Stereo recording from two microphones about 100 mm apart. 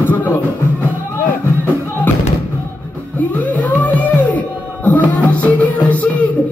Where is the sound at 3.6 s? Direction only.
15° left (ahead or behind).